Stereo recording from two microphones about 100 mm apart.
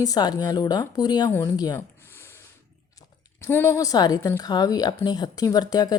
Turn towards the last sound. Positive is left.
turn(degrees=40)  # may be behind; listen again after turning